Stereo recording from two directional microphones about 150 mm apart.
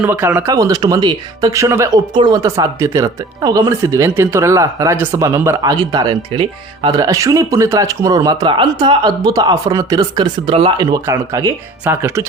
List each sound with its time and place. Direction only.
0.0 s speech: 15° right (ahead or behind)